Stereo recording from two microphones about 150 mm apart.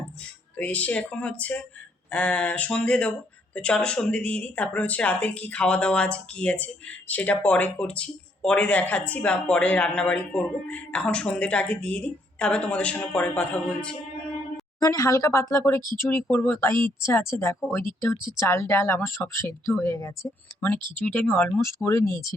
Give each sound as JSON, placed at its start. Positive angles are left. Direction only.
{"t": 0.5, "sound": "speech", "side_deg": 10}
{"t": 14.8, "sound": "speech", "side_deg": 20}